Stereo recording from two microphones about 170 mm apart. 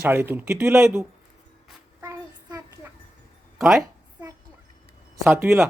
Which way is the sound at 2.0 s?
20° right (ahead or behind).